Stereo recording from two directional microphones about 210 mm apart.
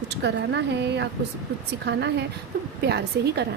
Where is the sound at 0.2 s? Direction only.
60° right (ahead or behind).